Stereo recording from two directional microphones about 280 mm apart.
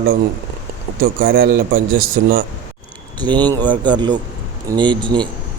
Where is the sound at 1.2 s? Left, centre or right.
Right.